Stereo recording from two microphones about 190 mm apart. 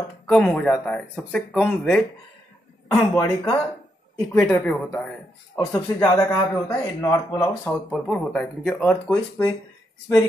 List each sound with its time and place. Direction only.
0.3 s speech: 5° left (ahead or behind)
3.0 s a man's voice: 20° left (ahead or behind); by 5.1 s 5° left (ahead or behind)
5.6 s a man's voice: 20° left (ahead or behind)
7.9 s speech: centre (ahead or behind)